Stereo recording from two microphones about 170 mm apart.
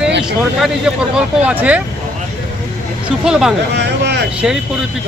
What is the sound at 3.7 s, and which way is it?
Vehicle, 80° right.